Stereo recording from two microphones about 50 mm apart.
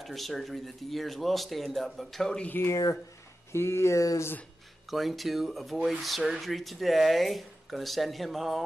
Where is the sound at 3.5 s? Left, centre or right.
Left.